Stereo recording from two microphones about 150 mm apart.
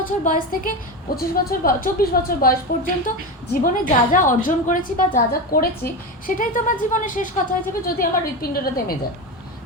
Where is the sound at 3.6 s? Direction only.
60° left (ahead or behind).